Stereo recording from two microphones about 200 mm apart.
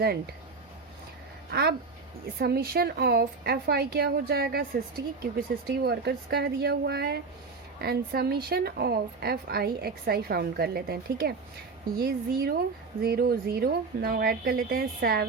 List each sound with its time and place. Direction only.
1.5 s a woman's voice: 55° right (ahead or behind)